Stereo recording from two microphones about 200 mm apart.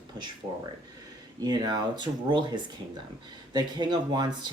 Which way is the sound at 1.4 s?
20° right (ahead or behind).